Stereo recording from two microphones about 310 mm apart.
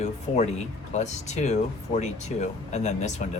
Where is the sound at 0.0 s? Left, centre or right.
Left.